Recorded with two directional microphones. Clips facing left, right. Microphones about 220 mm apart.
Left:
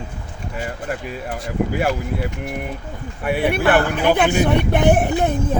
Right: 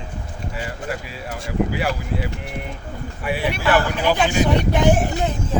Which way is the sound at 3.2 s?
55° left (ahead or behind).